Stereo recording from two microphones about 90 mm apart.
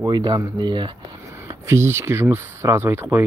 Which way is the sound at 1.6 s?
30° right (ahead or behind).